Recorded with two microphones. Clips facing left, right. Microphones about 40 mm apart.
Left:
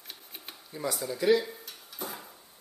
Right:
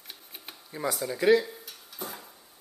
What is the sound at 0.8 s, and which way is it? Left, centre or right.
Speech, centre.